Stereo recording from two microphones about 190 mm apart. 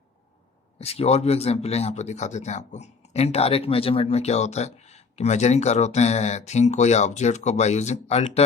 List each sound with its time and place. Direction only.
0.8 s speech: 35° left (ahead or behind)